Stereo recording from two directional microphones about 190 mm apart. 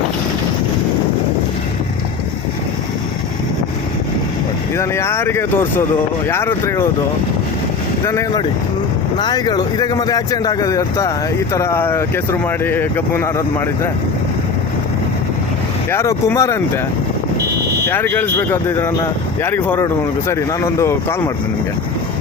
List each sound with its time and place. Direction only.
4.8 s speech: 15° left (ahead or behind)
8.0 s speech: 15° left (ahead or behind)
15.9 s speech: 15° left (ahead or behind)
17.8 s speech: 10° left (ahead or behind)